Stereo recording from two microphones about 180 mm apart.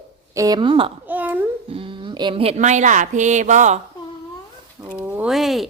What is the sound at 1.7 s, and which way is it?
Speech, 30° right (ahead or behind).